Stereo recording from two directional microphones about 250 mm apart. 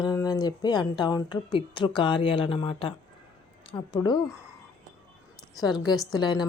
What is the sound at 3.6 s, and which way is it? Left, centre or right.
Speech, centre.